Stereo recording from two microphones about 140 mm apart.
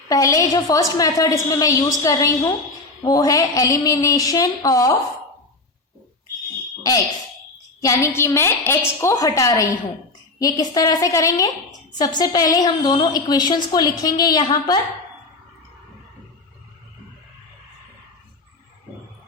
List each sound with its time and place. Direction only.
0.1 s a woman's voice: 25° left (ahead or behind)
7.8 s a woman's voice: 25° left (ahead or behind)